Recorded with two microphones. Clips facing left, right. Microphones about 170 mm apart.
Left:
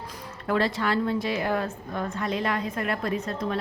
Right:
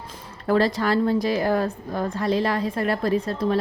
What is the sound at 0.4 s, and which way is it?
A woman's voice, 35° right (ahead or behind).